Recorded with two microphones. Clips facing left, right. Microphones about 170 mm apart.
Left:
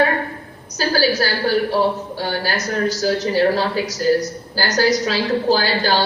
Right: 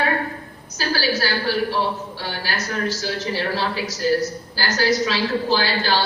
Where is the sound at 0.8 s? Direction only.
40° left (ahead or behind).